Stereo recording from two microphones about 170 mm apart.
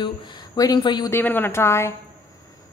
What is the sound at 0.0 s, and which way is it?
Speech, 25° left (ahead or behind).